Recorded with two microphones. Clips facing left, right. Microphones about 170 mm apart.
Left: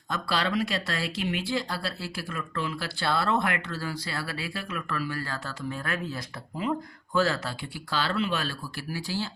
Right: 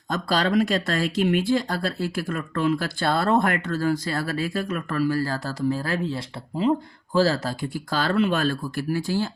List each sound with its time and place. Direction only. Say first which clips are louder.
0.1 s speech: right 6 dB; 45° right (ahead or behind)